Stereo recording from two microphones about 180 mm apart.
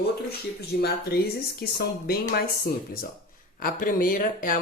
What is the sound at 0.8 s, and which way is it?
Speech, 60° left (ahead or behind).